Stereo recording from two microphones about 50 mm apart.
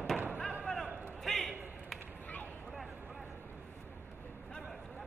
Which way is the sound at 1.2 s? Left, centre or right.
Centre.